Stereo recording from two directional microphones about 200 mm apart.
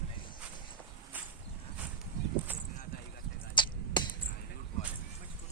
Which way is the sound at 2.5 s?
10° right (ahead or behind).